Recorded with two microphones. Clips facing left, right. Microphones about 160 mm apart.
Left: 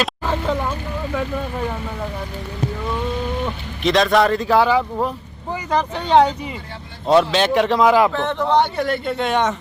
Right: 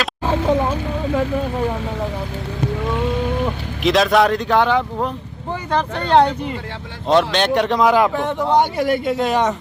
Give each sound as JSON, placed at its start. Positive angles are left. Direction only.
{"t": 0.3, "sound": "vehicle", "side_deg": -15}
{"t": 3.8, "sound": "speech", "side_deg": 0}
{"t": 8.1, "sound": "a man's voice", "side_deg": -10}